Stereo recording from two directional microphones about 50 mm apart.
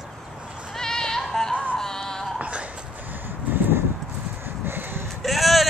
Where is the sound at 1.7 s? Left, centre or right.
Centre.